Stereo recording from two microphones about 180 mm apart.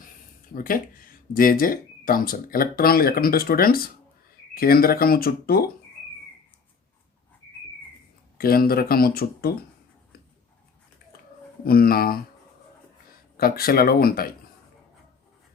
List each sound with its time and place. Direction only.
0.5 s speech: 50° left (ahead or behind)
8.4 s speech: 55° left (ahead or behind)
11.6 s speech: 55° left (ahead or behind)
13.3 s speech: 55° left (ahead or behind)